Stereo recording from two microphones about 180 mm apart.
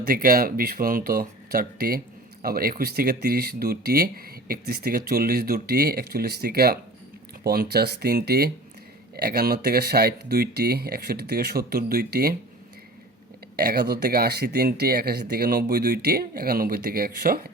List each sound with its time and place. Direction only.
0.0 s speech: 55° right (ahead or behind)
13.6 s speech: 60° right (ahead or behind)